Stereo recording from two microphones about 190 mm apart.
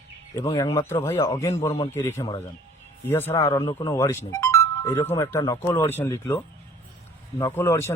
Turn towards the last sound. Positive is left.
turn(degrees=15)  # may be behind; listen again after turning